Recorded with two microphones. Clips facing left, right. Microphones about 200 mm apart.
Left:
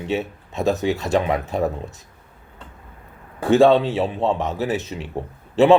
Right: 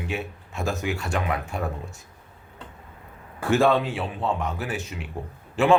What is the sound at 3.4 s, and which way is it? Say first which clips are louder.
A man's voice: left 6 dB; 15° left (ahead or behind).